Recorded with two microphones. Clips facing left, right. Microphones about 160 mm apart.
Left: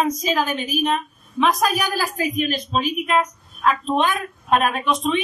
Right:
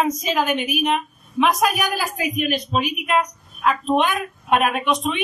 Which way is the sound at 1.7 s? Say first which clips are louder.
Left 1 dB; 15° right (ahead or behind).